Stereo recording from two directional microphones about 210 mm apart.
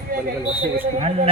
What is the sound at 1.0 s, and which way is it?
Speech, 30° right (ahead or behind).